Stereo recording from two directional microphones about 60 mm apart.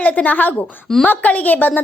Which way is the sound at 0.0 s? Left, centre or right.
Left.